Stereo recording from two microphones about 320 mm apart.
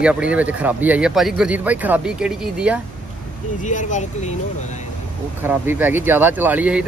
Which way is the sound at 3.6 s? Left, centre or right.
Left.